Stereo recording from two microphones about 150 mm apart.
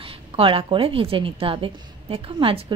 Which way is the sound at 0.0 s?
35° right (ahead or behind).